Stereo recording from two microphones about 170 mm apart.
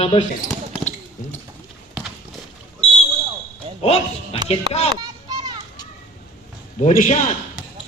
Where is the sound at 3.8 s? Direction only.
35° left (ahead or behind).